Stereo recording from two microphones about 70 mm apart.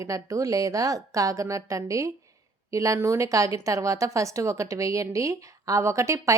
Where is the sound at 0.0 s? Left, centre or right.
Right.